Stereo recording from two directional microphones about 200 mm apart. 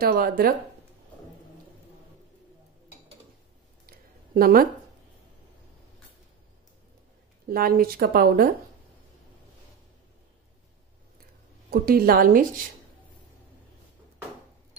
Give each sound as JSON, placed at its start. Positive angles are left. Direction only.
{"t": 0.0, "sound": "speech", "side_deg": -50}
{"t": 3.8, "sound": "a sound", "side_deg": -45}
{"t": 7.4, "sound": "speech", "side_deg": -50}
{"t": 11.7, "sound": "speech", "side_deg": -50}